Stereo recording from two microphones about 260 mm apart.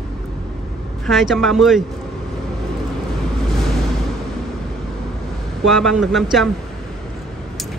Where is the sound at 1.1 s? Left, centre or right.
Centre.